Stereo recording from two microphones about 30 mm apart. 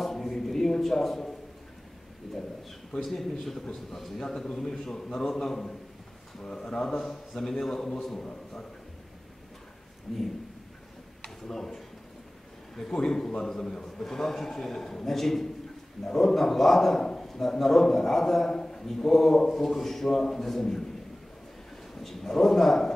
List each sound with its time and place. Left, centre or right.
0.0 s a sound: centre
3.1 s a man's voice: centre
6.4 s speech: left
7.1 s a man's voice: centre
10.1 s speech: centre
11.2 s a man's voice: centre
21.9 s a man's voice: centre